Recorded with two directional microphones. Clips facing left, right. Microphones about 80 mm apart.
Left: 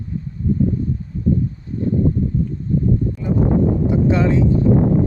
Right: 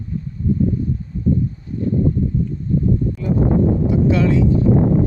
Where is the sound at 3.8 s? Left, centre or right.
Left.